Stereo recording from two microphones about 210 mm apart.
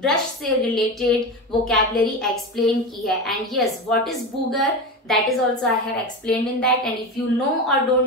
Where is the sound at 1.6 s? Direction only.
Centre (ahead or behind).